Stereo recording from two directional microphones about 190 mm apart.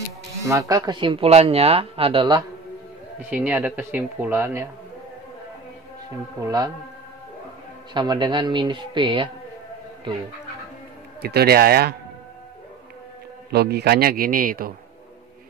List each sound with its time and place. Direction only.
0.4 s speech: 15° right (ahead or behind)
3.3 s speech: 5° right (ahead or behind)
6.4 s speech: 20° right (ahead or behind)
7.9 s speech: 25° right (ahead or behind)
11.1 s speech: 55° right (ahead or behind)
13.5 s a man's voice: 55° right (ahead or behind)